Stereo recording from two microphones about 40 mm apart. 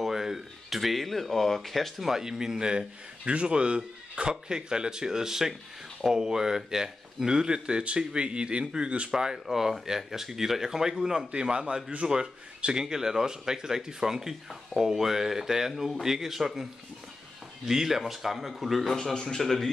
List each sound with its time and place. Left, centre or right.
0.0 s speech: centre
2.0 s speech: centre; by 9.1 s right
9.1 s speech: centre
17.6 s speech: centre